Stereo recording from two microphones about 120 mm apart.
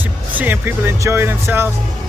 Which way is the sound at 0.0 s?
15° right (ahead or behind).